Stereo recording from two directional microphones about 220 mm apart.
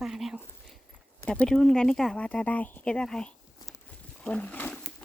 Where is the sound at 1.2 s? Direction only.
5° left (ahead or behind).